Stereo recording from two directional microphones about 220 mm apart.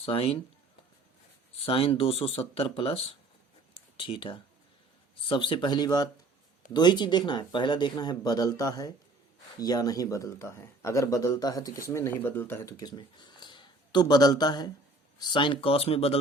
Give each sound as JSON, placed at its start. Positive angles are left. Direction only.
{"t": 0.0, "sound": "speech", "side_deg": 25}
{"t": 1.5, "sound": "speech", "side_deg": 25}